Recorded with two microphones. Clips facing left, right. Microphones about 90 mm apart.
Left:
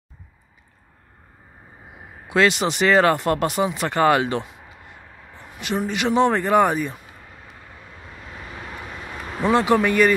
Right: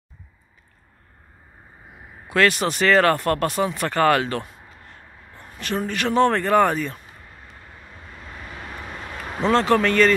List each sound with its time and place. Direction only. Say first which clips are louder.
2.2 s speech: left 1 dB; 20° left (ahead or behind)
9.4 s speech: even; 15° left (ahead or behind)